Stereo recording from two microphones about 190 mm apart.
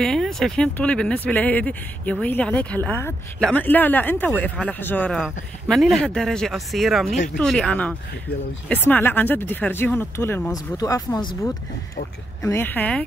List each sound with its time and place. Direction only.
0.0 s speech: centre (ahead or behind); by 11.2 s 20° left (ahead or behind)
12.4 s speech: 15° left (ahead or behind)